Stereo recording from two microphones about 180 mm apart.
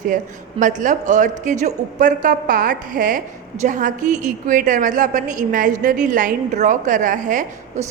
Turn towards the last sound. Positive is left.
turn(degrees=-45)  # may be behind; listen again after turning